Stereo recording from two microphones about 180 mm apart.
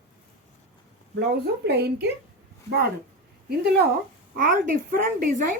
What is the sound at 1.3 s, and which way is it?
Speech, 65° right (ahead or behind).